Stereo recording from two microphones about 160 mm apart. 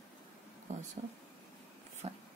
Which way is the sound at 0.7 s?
45° right (ahead or behind).